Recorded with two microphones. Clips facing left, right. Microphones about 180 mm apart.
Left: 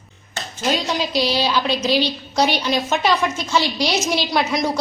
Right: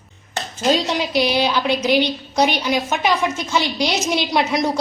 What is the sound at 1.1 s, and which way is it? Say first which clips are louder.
A woman's voice: right 2 dB; 20° right (ahead or behind).